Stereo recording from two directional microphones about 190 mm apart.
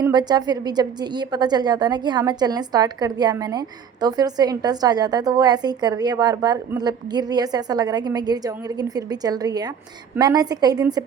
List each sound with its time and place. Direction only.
0.0 s a woman's voice: 20° right (ahead or behind)